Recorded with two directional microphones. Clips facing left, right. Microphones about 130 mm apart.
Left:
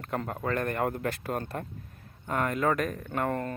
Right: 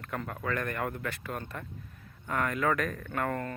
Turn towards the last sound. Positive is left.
turn(degrees=25)  # may be behind; listen again after turning